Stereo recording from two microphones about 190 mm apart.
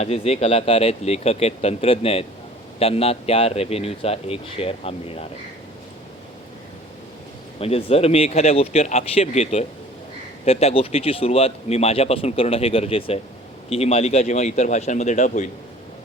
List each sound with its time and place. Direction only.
0.0 s speech: 35° left (ahead or behind)
7.6 s speech: 30° left (ahead or behind)